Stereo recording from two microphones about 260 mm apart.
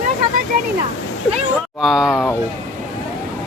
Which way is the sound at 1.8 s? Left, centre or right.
Centre.